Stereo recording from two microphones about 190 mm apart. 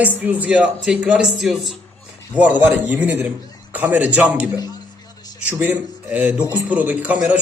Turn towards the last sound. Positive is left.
turn(degrees=-10)  # may be behind; listen again after turning